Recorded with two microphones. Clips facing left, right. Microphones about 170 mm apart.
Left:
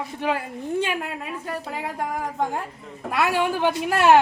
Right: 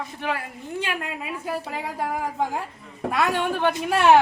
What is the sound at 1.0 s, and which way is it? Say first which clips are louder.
A woman's voice: even; 5° right (ahead or behind).